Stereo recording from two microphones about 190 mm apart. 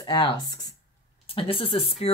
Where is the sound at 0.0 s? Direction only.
25° left (ahead or behind).